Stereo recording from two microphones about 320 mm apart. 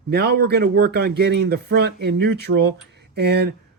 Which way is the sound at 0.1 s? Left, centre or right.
Right.